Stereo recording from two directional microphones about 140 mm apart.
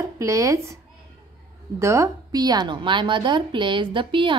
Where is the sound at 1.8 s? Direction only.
20° right (ahead or behind).